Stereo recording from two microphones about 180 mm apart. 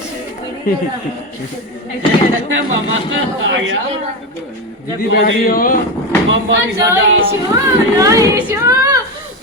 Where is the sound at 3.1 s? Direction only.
90° right.